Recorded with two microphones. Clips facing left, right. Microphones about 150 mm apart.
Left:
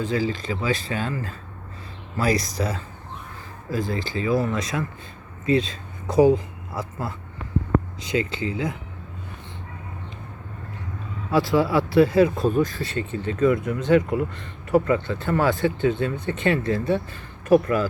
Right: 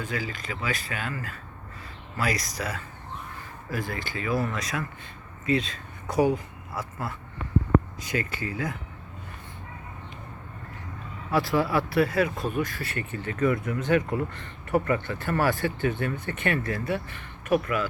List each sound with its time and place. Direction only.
0.0 s speech: 30° left (ahead or behind)
11.3 s speech: 25° left (ahead or behind)